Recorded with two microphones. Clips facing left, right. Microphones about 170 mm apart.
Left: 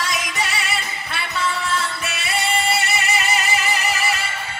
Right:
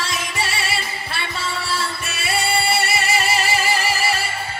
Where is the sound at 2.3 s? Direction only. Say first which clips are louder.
Right 1 dB; 10° right (ahead or behind).